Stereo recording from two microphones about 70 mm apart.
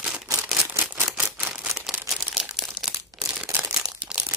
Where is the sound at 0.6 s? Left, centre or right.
Right.